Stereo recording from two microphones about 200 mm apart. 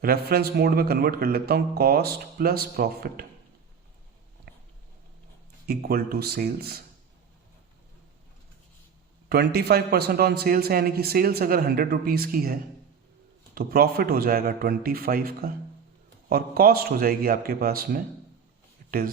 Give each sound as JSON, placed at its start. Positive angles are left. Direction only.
{"t": 0.0, "sound": "a man's voice", "side_deg": -50}
{"t": 4.5, "sound": "a sound", "side_deg": -55}
{"t": 5.6, "sound": "a man's voice", "side_deg": -50}
{"t": 9.3, "sound": "a man's voice", "side_deg": -50}